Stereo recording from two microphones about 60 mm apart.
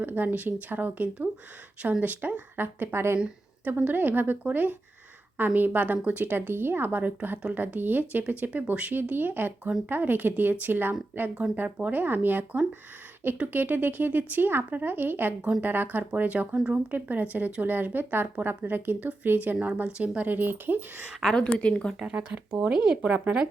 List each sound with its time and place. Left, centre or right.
0.0 s speech: right
3.2 s a sound: centre
3.7 s speech: right
19.6 s speech: right
21.2 s a woman's voice: centre
21.5 s a woman's voice: centre
22.1 s speech: centre